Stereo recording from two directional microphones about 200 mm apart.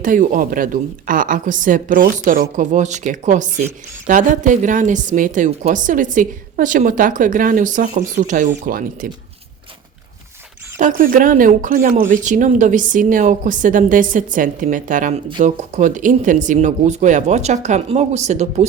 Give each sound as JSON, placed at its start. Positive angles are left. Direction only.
{"t": 0.0, "sound": "a woman's voice", "side_deg": -40}
{"t": 10.8, "sound": "a woman's voice", "side_deg": -40}